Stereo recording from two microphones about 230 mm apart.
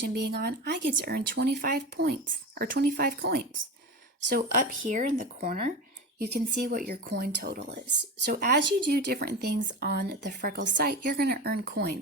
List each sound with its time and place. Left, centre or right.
0.0 s speech: right